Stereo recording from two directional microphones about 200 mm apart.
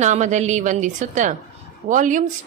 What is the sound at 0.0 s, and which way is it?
A woman's voice, 35° right (ahead or behind).